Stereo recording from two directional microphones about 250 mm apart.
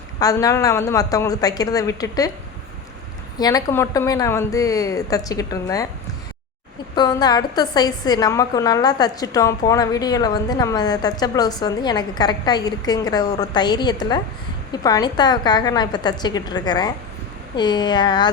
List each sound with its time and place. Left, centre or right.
0.2 s a woman's voice: centre
3.3 s a woman's voice: centre
6.9 s a woman's voice: centre